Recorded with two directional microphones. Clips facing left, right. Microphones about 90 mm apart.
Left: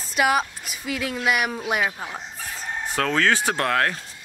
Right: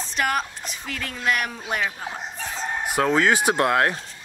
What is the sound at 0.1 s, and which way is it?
Speech, 5° left (ahead or behind).